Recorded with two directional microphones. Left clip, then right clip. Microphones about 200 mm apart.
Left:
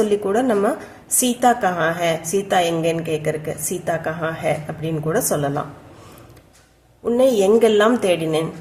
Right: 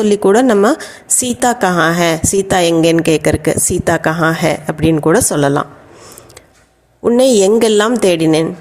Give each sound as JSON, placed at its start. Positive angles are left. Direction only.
{"t": 0.0, "sound": "a woman's voice", "side_deg": -40}
{"t": 7.0, "sound": "a woman's voice", "side_deg": -45}